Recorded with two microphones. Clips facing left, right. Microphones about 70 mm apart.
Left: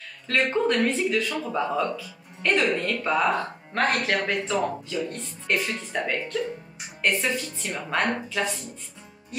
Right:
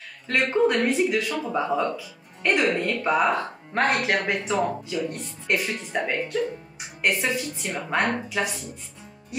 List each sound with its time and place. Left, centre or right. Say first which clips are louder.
0.3 s speech: right 2 dB; centre